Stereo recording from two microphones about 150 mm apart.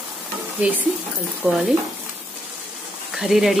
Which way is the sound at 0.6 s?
10° right (ahead or behind).